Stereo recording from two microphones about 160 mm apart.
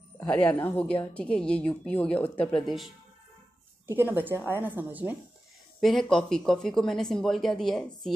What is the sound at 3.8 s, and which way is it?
A woman's voice, 15° right (ahead or behind).